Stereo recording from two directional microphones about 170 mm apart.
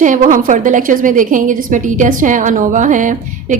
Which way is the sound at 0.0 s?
50° right (ahead or behind).